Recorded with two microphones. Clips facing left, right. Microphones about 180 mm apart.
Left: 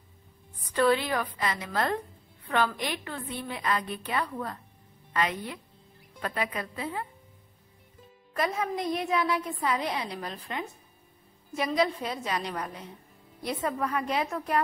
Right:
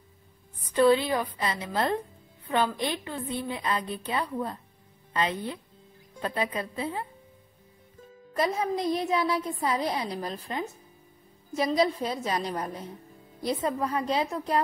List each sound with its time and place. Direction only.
0.7 s a woman's voice: 20° right (ahead or behind)
8.5 s a woman's voice: 30° right (ahead or behind)
11.5 s a woman's voice: 35° right (ahead or behind)